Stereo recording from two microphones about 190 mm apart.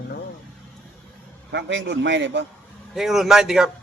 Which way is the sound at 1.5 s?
70° right (ahead or behind).